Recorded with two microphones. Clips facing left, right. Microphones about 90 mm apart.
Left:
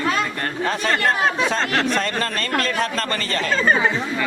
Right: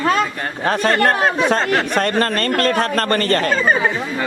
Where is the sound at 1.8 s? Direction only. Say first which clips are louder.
Right 4 dB; 55° right (ahead or behind).